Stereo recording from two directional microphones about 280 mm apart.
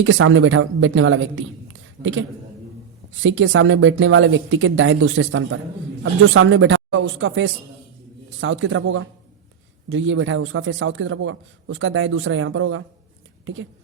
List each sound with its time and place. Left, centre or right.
0.0 s a man's voice: right